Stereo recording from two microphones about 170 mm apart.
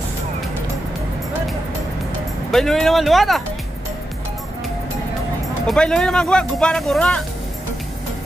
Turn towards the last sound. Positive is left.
turn(degrees=0)  # may be behind; listen again after turning